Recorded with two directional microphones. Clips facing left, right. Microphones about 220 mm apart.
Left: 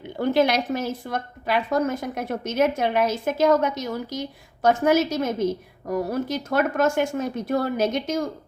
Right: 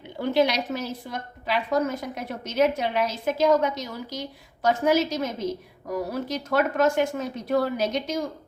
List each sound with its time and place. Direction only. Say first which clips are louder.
0.2 s a woman's voice: left 2 dB; 50° left (ahead or behind)